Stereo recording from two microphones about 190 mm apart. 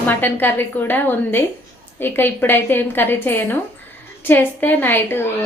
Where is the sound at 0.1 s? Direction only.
10° left (ahead or behind).